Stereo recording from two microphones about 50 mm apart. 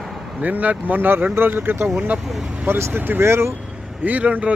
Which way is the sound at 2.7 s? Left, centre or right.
Right.